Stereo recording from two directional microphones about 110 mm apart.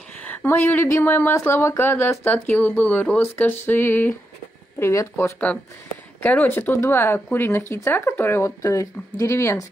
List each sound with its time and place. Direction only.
0.2 s speech: 15° left (ahead or behind)